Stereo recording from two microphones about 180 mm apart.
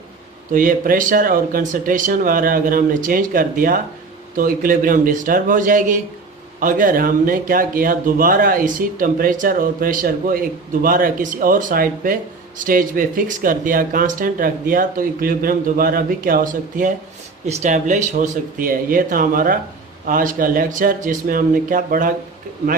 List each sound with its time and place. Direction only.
0.5 s speech: 50° right (ahead or behind)